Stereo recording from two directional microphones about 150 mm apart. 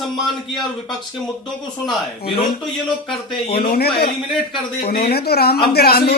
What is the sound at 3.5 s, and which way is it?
Speech, 90° left.